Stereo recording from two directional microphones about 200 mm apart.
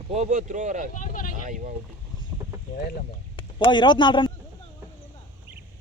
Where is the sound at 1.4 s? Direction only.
40° right (ahead or behind).